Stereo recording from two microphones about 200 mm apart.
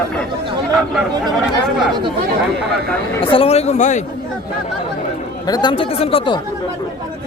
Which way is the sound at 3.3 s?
30° left (ahead or behind).